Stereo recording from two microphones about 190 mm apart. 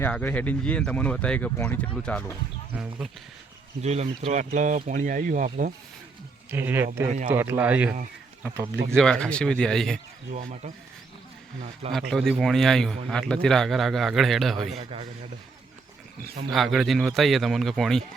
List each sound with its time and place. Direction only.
0.0 s speech: 10° left (ahead or behind)
2.7 s a man's voice: 5° right (ahead or behind)
3.8 s speech: 35° right (ahead or behind)
6.5 s a man's voice: 10° right (ahead or behind)
9.0 s a man's voice: 5° left (ahead or behind)
11.9 s a man's voice: centre (ahead or behind)
14.7 s speech: 30° right (ahead or behind)
16.2 s speech: 50° right (ahead or behind)
16.5 s a man's voice: centre (ahead or behind)